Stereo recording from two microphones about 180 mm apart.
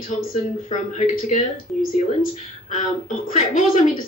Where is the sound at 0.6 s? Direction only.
45° left (ahead or behind).